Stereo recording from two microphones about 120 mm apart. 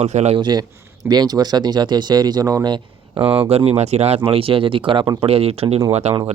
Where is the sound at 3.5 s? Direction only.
60° right (ahead or behind).